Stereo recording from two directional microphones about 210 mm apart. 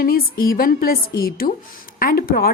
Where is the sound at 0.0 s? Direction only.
45° left (ahead or behind).